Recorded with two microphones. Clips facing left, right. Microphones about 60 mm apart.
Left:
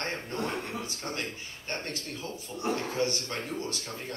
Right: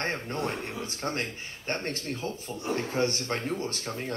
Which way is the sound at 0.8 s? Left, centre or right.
Right.